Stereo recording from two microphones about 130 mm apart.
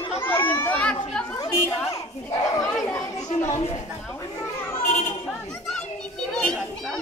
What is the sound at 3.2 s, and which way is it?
Children playing, 55° left (ahead or behind).